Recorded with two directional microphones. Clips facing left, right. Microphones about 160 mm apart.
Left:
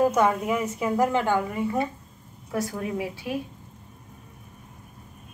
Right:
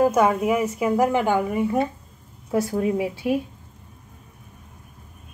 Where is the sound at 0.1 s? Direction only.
10° right (ahead or behind).